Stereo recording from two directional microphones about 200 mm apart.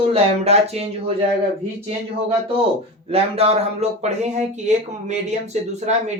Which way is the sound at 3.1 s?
30° right (ahead or behind).